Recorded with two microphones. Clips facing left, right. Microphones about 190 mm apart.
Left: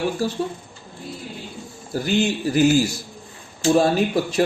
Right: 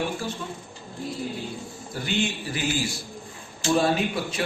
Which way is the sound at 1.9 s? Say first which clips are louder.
Left 7 dB; 40° left (ahead or behind).